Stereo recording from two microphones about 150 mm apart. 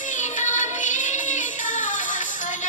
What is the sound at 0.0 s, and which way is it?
Music, 55° left (ahead or behind).